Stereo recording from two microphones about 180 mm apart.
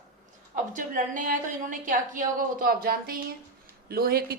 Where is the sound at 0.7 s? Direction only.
45° right (ahead or behind).